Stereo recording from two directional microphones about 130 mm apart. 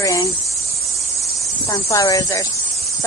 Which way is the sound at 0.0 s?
25° left (ahead or behind).